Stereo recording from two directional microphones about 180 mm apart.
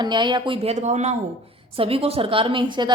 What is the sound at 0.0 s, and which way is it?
A woman's voice, 25° right (ahead or behind).